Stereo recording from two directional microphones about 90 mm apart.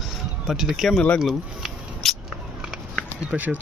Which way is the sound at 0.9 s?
15° left (ahead or behind).